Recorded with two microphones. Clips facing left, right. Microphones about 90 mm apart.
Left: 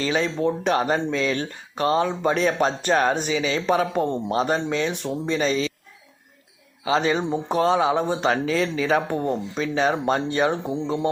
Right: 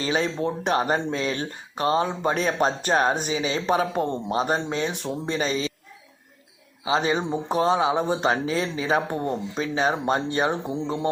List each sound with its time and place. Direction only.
0.0 s speech: 30° right (ahead or behind)
6.8 s speech: 25° right (ahead or behind)